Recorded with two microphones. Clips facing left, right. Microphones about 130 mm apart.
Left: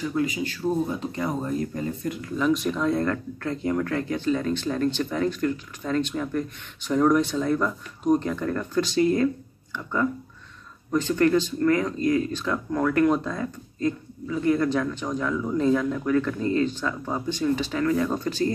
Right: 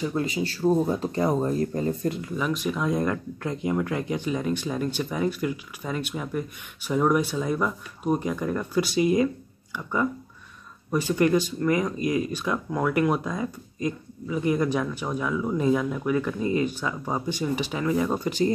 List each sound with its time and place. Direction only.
0.1 s speech: 30° right (ahead or behind)
2.2 s speech: 10° right (ahead or behind)
10.9 s speech: 10° right (ahead or behind)